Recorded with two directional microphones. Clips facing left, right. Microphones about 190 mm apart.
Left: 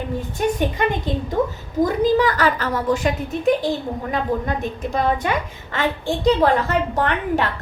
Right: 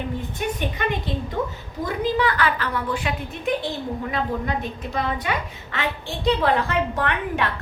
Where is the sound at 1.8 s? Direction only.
40° left (ahead or behind).